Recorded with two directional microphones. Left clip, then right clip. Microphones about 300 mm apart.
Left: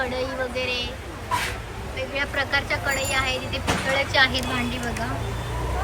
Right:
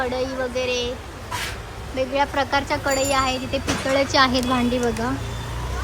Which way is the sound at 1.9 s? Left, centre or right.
Centre.